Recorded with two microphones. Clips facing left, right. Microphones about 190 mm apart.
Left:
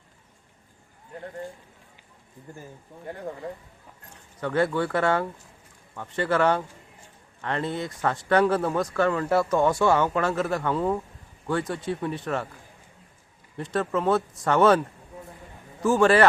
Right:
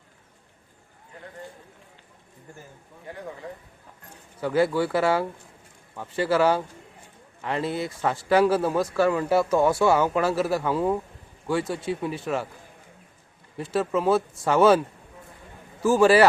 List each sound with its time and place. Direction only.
4.4 s speech: 5° right (ahead or behind)
13.6 s speech: 5° right (ahead or behind)
15.8 s speech: 5° right (ahead or behind)